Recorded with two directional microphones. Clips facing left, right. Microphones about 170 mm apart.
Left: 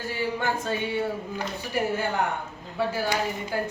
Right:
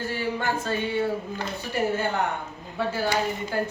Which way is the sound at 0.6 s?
15° left (ahead or behind).